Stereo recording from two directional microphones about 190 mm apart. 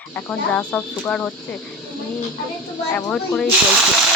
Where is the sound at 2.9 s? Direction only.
5° left (ahead or behind).